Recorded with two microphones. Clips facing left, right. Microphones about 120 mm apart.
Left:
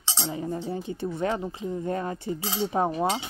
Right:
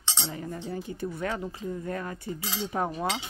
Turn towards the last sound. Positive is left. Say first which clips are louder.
# left 5 dB
turn(degrees=30)  # may be behind; listen again after turning